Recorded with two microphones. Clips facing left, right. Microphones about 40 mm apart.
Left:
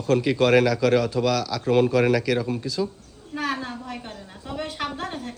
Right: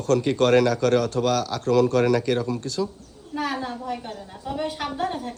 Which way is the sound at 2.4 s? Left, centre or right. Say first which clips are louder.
Even; left.